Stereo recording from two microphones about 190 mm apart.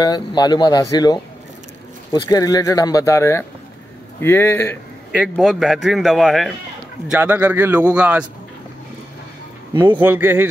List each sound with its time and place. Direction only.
0.0 s speech: 20° left (ahead or behind)
5.3 s a man's voice: centre (ahead or behind)
9.9 s a man's voice: 10° right (ahead or behind)